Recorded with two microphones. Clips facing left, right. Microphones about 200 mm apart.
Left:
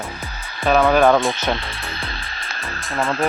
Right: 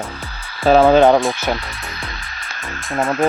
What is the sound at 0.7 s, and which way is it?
Speech, 30° right (ahead or behind).